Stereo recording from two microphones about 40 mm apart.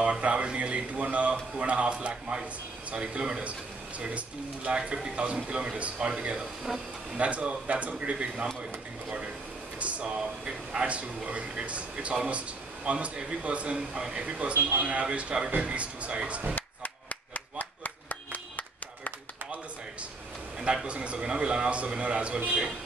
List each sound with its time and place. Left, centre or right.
0.0 s a man's voice: right
4.6 s a man's voice: right
9.8 s air conditioning: right
10.4 s speech: right
16.5 s a sound: left
20.5 s a man's voice: right